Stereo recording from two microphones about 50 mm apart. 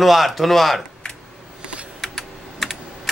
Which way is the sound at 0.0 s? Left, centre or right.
Centre.